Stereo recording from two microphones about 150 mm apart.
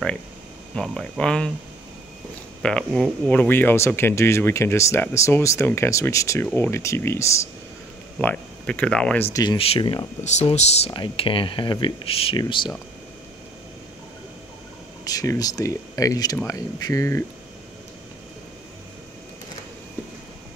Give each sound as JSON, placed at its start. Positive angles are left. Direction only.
{"t": 0.7, "sound": "speech", "side_deg": 5}
{"t": 2.6, "sound": "speech", "side_deg": 5}
{"t": 9.3, "sound": "speech", "side_deg": 25}
{"t": 9.6, "sound": "speech", "side_deg": 35}
{"t": 10.2, "sound": "speech", "side_deg": 50}
{"t": 10.9, "sound": "speech", "side_deg": 35}
{"t": 15.0, "sound": "speech", "side_deg": 25}